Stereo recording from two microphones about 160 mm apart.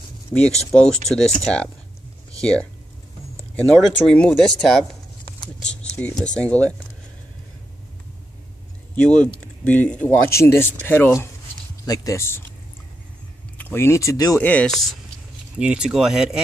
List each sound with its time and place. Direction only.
0.7 s speech: 5° left (ahead or behind)
3.5 s speech: 5° left (ahead or behind)
8.9 s speech: 5° left (ahead or behind)
13.6 s speech: 15° left (ahead or behind)
14.4 s speech: 10° left (ahead or behind)